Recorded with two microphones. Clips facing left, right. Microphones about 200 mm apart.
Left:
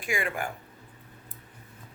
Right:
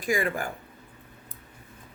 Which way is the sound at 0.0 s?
40° right (ahead or behind).